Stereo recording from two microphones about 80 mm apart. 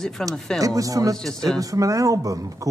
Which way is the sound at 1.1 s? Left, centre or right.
Centre.